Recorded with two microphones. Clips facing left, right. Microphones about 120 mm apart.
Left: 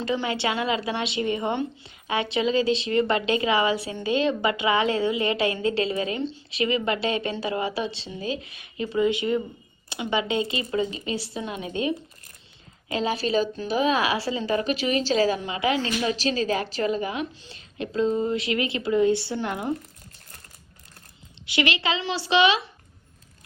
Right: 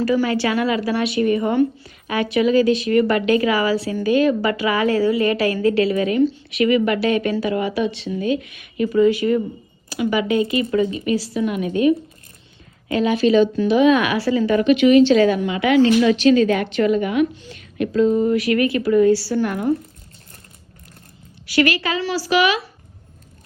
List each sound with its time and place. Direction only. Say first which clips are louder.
0.0 s a woman's voice: right 7 dB; 25° left (ahead or behind)
21.4 s a woman's voice: right 6 dB; 20° left (ahead or behind)